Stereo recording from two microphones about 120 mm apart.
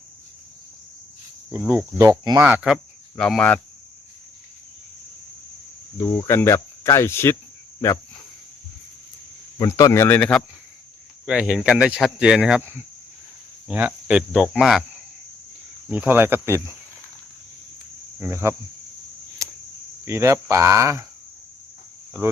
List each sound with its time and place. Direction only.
1.5 s speech: 15° right (ahead or behind)
3.2 s speech: 5° left (ahead or behind)
6.0 s speech: 30° left (ahead or behind)
6.2 s speech: 20° left (ahead or behind)
9.6 s speech: 30° left (ahead or behind); by 10.4 s 10° left (ahead or behind)
11.3 s speech: 5° right (ahead or behind)
13.7 s speech: 10° right (ahead or behind)
15.9 s speech: 15° right (ahead or behind)
18.2 s speech: 20° right (ahead or behind)
19.4 s cricket: 25° right (ahead or behind)
20.1 s speech: 25° right (ahead or behind)